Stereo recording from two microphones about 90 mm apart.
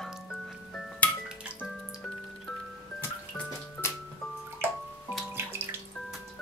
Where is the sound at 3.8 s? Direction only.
30° left (ahead or behind).